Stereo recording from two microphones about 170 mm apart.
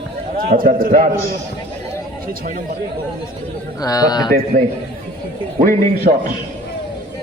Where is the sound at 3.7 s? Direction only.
20° left (ahead or behind).